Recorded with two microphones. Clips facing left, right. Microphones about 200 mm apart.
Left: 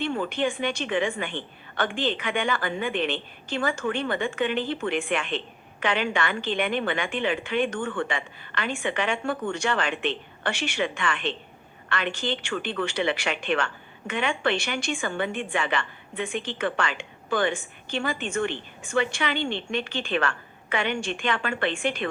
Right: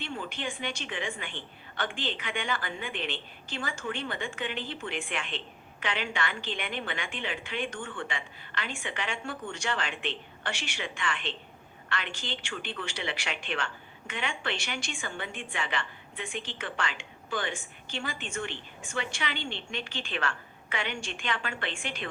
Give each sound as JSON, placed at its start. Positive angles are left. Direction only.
{"t": 0.0, "sound": "a woman's voice", "side_deg": 65}